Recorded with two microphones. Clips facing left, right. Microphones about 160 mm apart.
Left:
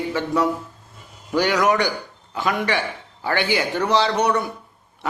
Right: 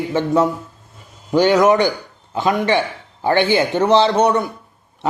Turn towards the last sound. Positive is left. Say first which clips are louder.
# right 5 dB
turn(degrees=-25)  # may be behind; listen again after turning